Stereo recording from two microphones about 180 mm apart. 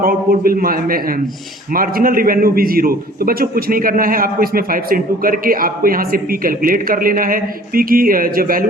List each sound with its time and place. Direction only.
0.0 s a man's voice: 55° right (ahead or behind)